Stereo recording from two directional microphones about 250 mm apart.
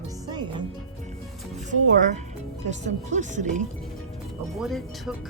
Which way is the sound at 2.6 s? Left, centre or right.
Right.